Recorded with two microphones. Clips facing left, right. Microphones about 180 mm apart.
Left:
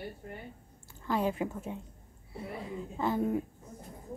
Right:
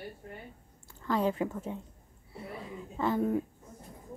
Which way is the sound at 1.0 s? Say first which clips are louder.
Right 1 dB; 15° left (ahead or behind).